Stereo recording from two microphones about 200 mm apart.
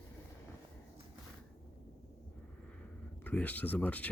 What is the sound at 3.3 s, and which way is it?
Speech, 10° left (ahead or behind).